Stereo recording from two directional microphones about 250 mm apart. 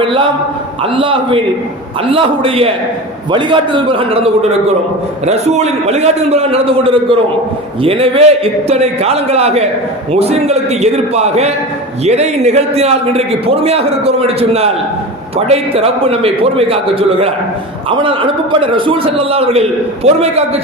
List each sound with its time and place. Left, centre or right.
0.0 s a man's voice: centre